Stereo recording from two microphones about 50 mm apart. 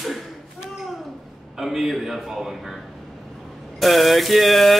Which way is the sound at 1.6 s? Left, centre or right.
Centre.